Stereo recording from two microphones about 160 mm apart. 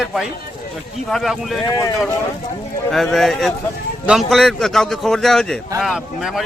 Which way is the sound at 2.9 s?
Centre (ahead or behind).